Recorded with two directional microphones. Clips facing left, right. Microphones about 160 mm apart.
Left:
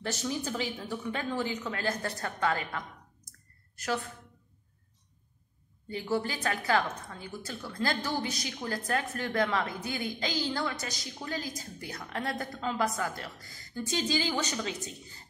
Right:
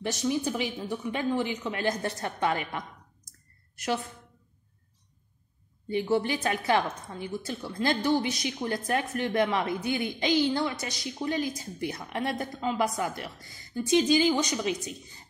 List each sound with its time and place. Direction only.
0.0 s a woman's voice: 15° right (ahead or behind)
5.9 s a woman's voice: 20° right (ahead or behind)